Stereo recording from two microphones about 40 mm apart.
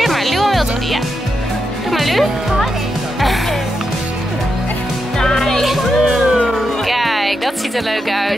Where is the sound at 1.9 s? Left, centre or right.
Centre.